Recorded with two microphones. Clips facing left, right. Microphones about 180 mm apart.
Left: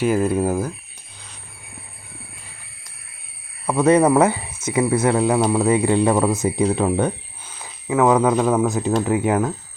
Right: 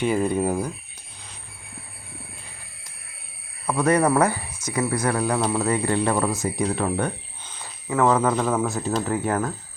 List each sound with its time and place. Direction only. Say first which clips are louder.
0.0 s speech: left 3 dB; 5° left (ahead or behind)
3.7 s speech: left 5 dB; 20° left (ahead or behind)